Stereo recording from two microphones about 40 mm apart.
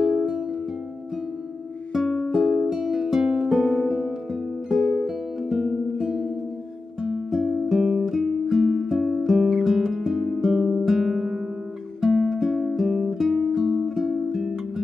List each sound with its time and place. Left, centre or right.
0.0 s music: centre
2.0 s music: centre
2.3 s music: centre